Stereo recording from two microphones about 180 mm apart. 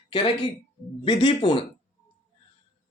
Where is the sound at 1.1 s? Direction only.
25° left (ahead or behind).